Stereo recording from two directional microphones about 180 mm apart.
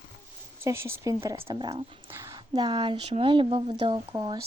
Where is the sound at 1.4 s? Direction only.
30° right (ahead or behind).